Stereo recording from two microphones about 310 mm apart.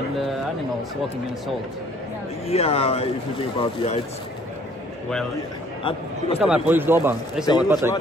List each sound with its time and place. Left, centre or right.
2.4 s speech: centre
5.9 s speech: centre
6.4 s speech: centre
7.4 s speech: centre